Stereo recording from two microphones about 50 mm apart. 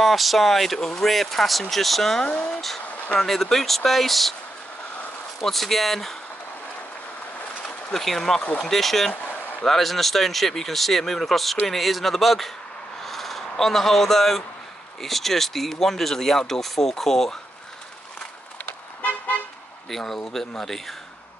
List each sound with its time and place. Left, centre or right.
0.0 s speech: centre
2.2 s speech: left
3.2 s speech: centre
5.4 s speech: centre
7.9 s speech: centre
8.4 s speech: left
8.6 s speech: centre
9.1 s a sound: left
9.7 s speech: centre
13.0 s a sound: centre
13.6 s speech: centre
18.9 s car: left
19.9 s speech: centre